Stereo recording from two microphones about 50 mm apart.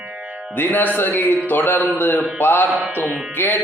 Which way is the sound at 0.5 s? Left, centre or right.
Left.